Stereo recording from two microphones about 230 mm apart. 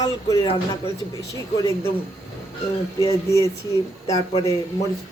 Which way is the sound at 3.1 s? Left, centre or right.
Centre.